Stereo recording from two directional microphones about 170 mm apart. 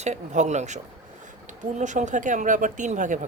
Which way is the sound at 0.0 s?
45° right (ahead or behind).